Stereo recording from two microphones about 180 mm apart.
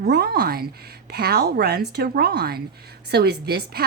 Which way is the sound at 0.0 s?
65° right (ahead or behind).